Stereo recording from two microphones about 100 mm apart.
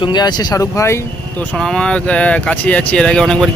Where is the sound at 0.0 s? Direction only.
45° left (ahead or behind).